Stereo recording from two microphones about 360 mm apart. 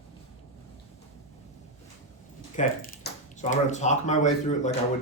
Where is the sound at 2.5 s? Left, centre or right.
Left.